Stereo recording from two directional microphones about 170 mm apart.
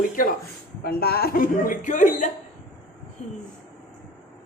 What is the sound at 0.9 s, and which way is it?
A woman's voice, 65° left (ahead or behind).